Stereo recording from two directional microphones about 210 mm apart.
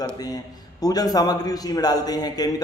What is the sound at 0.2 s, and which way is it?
A man's voice, 20° left (ahead or behind).